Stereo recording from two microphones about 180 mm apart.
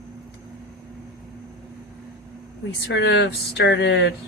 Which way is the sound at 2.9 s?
75° left (ahead or behind).